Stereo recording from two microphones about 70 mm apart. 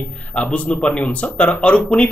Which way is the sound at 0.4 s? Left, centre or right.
Centre.